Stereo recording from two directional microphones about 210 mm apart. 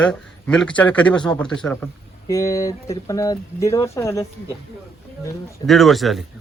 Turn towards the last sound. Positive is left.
turn(degrees=0)  # may be behind; listen again after turning